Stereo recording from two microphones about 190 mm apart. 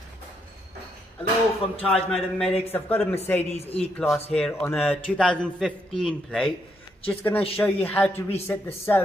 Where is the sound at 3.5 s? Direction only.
30° left (ahead or behind).